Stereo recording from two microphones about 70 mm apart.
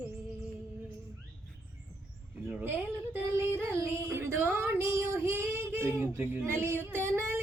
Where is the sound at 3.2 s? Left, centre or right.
Right.